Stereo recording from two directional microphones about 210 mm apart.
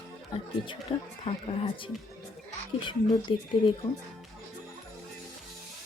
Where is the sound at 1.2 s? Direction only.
30° left (ahead or behind).